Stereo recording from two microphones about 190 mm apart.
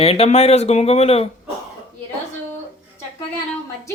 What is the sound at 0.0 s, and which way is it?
Speech, 30° left (ahead or behind).